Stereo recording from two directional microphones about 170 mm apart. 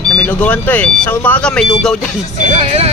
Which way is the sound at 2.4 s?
40° right (ahead or behind).